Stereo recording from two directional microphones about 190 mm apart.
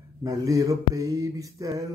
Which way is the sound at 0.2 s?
15° right (ahead or behind).